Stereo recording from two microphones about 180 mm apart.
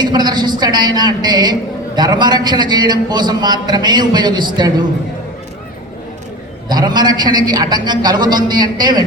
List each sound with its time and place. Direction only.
0.0 s a woman's voice: 25° right (ahead or behind)
6.7 s a man's voice: 25° right (ahead or behind)